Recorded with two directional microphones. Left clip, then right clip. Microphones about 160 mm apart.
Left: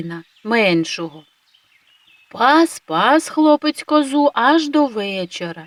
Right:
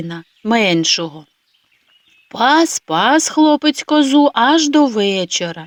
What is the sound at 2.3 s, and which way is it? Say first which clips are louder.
Speech: right 1 dB; 30° right (ahead or behind).